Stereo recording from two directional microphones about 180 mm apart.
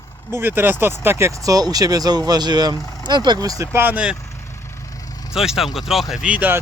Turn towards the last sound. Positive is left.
turn(degrees=-10)  # may be behind; listen again after turning